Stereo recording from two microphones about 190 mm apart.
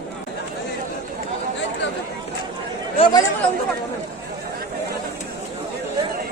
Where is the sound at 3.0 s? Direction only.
25° left (ahead or behind).